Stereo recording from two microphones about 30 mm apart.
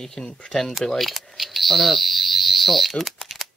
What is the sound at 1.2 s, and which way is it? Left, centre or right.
Fire alarm, centre.